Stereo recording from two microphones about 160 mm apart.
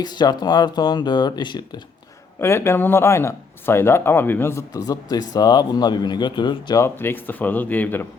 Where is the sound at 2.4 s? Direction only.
15° left (ahead or behind).